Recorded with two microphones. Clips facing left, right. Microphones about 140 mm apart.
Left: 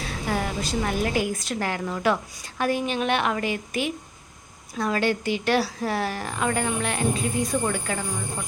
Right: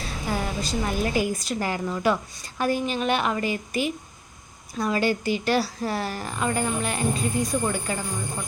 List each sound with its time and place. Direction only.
0.0 s a woman's voice: centre (ahead or behind)